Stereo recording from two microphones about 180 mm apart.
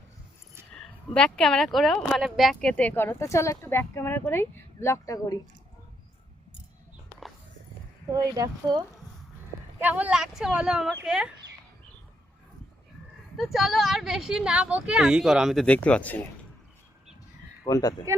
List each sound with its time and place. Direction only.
0.7 s speech: 5° left (ahead or behind); by 5.4 s 20° left (ahead or behind)
8.1 s speech: 20° right (ahead or behind)
9.8 s speech: 10° right (ahead or behind)
13.3 s speech: centre (ahead or behind)
17.7 s speech: 20° left (ahead or behind)